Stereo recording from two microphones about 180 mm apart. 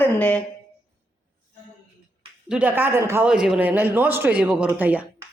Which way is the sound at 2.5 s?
10° right (ahead or behind).